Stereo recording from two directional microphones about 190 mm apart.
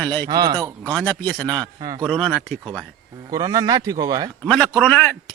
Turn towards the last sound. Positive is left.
turn(degrees=5)  # may be behind; listen again after turning